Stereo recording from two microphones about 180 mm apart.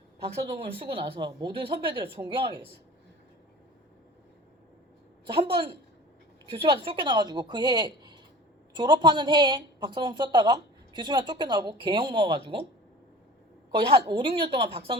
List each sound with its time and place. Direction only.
0.8 s a woman's voice: 30° right (ahead or behind)
5.2 s a woman's voice: 30° right (ahead or behind)
13.7 s a woman's voice: 25° right (ahead or behind)